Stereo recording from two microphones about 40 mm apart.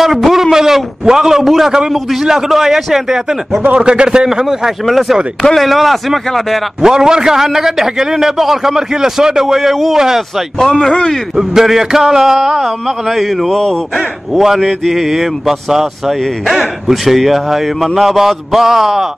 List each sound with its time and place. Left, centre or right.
0.0 s a sound: centre
1.5 s a man's voice: centre
3.8 s a man's voice: right
4.3 s a man's voice: centre
6.8 s a man's voice: centre
10.6 s speech: centre
11.3 s speech: centre
13.6 s speech: centre
14.6 s speech: centre